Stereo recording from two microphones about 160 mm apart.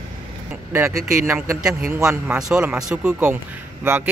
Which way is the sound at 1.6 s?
5° right (ahead or behind).